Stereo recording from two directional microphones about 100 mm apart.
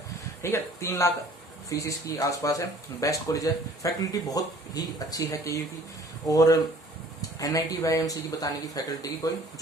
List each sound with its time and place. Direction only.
0.4 s speech: 30° left (ahead or behind)